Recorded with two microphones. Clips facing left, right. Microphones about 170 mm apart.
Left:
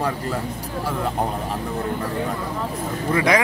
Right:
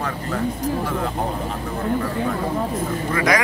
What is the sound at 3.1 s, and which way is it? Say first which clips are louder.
Speech: left 1 dB; 30° left (ahead or behind).